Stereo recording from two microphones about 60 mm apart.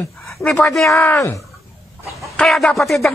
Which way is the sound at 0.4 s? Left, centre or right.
Centre.